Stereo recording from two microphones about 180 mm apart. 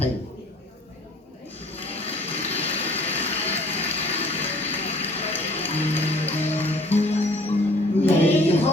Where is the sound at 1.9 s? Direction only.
35° left (ahead or behind).